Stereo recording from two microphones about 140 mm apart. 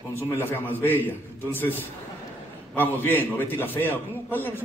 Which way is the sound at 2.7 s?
15° left (ahead or behind).